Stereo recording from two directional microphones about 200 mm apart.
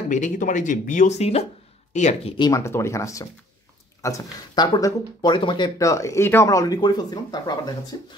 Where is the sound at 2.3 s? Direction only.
20° left (ahead or behind).